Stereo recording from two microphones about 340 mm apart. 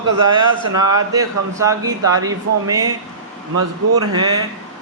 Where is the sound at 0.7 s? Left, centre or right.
Centre.